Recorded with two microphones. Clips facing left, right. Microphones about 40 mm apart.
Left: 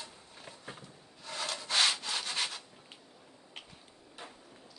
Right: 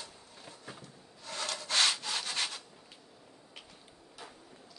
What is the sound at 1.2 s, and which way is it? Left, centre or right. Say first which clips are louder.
Wood: even; centre.